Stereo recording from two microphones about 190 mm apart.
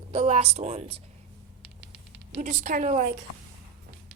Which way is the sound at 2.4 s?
40° right (ahead or behind).